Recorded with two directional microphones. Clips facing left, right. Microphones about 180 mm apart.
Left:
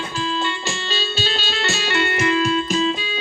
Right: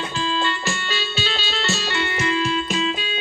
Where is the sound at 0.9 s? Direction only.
30° left (ahead or behind).